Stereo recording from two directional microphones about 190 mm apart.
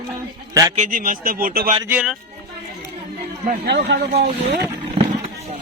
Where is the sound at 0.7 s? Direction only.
45° right (ahead or behind).